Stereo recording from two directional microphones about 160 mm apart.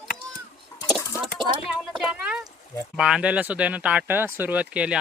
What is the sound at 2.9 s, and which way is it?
Speech, 5° right (ahead or behind).